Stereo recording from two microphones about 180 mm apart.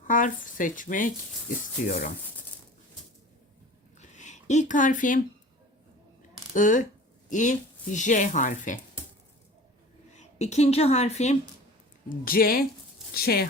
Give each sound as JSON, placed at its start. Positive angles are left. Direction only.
{"t": 0.0, "sound": "speech", "side_deg": 45}
{"t": 4.1, "sound": "speech", "side_deg": 40}
{"t": 6.5, "sound": "speech", "side_deg": 45}
{"t": 10.2, "sound": "a woman's voice", "side_deg": 40}
{"t": 12.0, "sound": "speech", "side_deg": 55}